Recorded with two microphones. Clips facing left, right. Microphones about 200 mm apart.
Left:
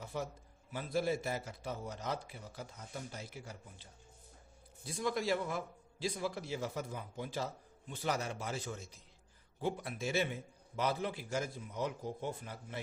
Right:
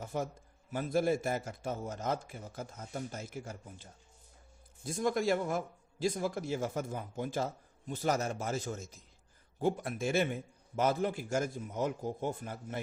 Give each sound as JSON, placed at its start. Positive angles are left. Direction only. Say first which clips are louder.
{"t": 0.0, "sound": "a sound", "louder": "right 4 dB", "side_deg": -45}
{"t": 0.7, "sound": "a man's voice", "louder": "right 5 dB", "side_deg": -50}
{"t": 4.9, "sound": "a man's voice", "louder": "right 4 dB", "side_deg": -45}